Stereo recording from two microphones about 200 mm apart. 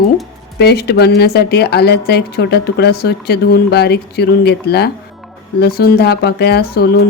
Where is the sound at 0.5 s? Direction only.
55° left (ahead or behind).